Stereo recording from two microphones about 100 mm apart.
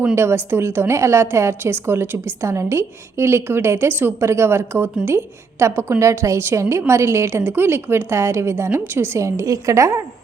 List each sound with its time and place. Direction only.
0.2 s a woman's voice: 25° right (ahead or behind)